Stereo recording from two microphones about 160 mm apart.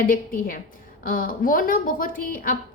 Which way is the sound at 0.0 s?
65° left (ahead or behind).